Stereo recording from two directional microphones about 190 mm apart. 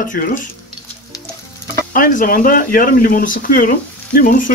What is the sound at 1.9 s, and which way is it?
Speech, 45° left (ahead or behind).